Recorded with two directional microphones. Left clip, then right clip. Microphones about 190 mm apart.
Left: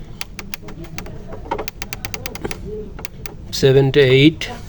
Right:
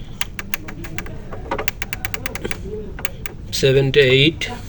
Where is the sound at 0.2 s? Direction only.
25° left (ahead or behind).